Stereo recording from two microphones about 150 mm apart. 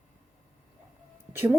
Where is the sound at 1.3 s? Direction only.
15° right (ahead or behind).